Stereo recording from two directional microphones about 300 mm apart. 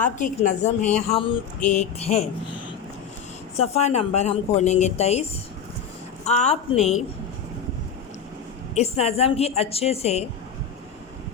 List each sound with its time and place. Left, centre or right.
0.0 s speech: left
3.6 s speech: left
6.2 s speech: left
8.7 s speech: left